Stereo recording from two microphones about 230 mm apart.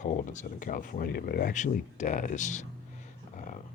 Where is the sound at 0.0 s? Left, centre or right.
Left.